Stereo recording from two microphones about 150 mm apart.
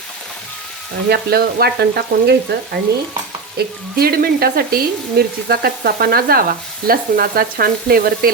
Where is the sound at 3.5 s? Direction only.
90° right.